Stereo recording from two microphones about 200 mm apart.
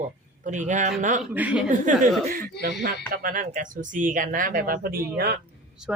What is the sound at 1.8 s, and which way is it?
Speech, 40° right (ahead or behind).